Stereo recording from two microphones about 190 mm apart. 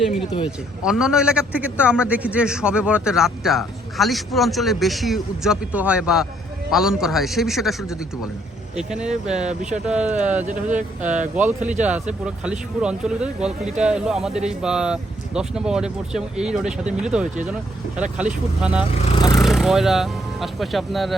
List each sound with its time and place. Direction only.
0.8 s a man's voice: 5° right (ahead or behind)
9.3 s speech: 35° right (ahead or behind)
9.8 s a man's voice: 5° right (ahead or behind)
10.4 s speech: 40° right (ahead or behind)
11.3 s a man's voice: 5° right (ahead or behind)